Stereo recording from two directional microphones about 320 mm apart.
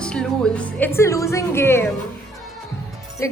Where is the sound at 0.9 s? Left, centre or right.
Centre.